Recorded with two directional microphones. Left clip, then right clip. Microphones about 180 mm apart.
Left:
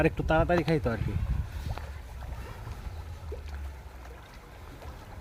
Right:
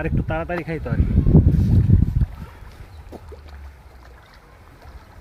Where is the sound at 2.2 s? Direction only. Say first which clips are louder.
Right 11 dB; 60° right (ahead or behind).